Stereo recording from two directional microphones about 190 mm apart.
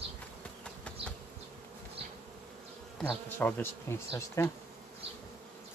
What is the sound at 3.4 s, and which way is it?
Bee, 10° left (ahead or behind).